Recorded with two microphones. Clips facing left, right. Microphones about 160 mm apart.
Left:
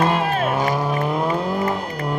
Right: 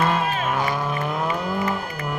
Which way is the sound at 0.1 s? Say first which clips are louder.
Left 3 dB; 55° left (ahead or behind).